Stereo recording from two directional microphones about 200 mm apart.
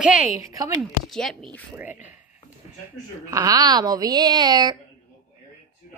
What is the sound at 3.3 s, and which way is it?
Speech, 20° right (ahead or behind).